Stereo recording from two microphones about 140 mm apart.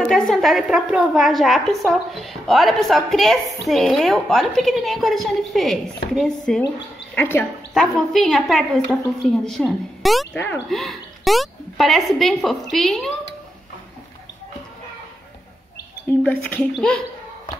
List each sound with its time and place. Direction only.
0.0 s a woman's voice: centre (ahead or behind)
7.2 s a woman's voice: 15° left (ahead or behind)
7.7 s a woman's voice: centre (ahead or behind)
10.3 s a woman's voice: 15° left (ahead or behind)
10.7 s a woman's voice: centre (ahead or behind)
16.2 s a woman's voice: 10° left (ahead or behind)